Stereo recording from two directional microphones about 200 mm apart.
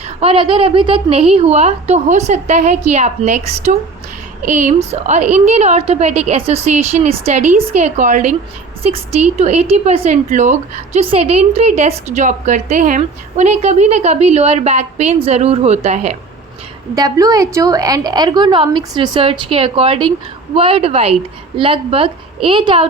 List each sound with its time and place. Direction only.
0.2 s a woman's voice: 25° right (ahead or behind)
16.9 s a woman's voice: 20° right (ahead or behind)